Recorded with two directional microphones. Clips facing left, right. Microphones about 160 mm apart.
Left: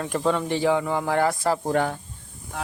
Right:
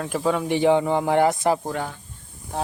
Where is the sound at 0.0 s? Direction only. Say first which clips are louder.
Right 1 dB; 5° right (ahead or behind); by 1.5 s 20° right (ahead or behind).